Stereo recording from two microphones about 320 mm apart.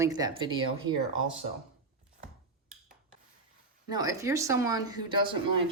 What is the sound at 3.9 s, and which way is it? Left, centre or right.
Speech, centre.